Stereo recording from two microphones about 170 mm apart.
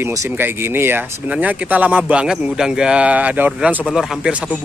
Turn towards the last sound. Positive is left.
turn(degrees=-5)  # may be behind; listen again after turning